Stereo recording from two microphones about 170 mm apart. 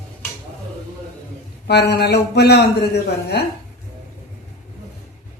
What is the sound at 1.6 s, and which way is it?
A woman's voice, 75° left (ahead or behind).